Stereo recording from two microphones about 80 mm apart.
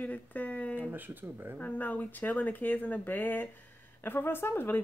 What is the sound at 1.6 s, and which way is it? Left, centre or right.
Speech, left.